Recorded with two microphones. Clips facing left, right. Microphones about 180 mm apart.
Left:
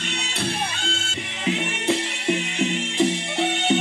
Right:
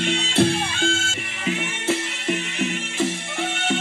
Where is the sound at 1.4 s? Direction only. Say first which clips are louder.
Left 1 dB; 20° left (ahead or behind).